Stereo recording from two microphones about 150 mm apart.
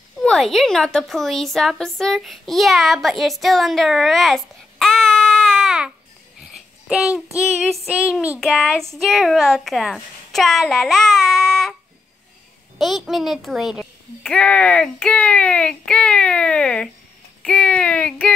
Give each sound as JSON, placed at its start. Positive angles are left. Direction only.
{"t": 0.2, "sound": "a woman's voice", "side_deg": 5}
{"t": 6.5, "sound": "a sound", "side_deg": -5}
{"t": 8.4, "sound": "a child's voice", "side_deg": 0}
{"t": 12.7, "sound": "a child's voice", "side_deg": 0}
{"t": 14.2, "sound": "a child's voice", "side_deg": 5}